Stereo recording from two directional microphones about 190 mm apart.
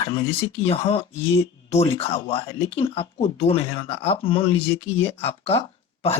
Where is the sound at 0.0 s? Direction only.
30° left (ahead or behind).